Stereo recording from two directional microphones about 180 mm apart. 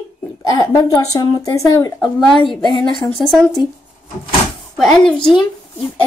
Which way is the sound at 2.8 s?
Centre (ahead or behind).